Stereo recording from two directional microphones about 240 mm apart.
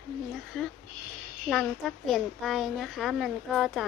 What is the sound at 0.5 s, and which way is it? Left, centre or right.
A child's voice, centre.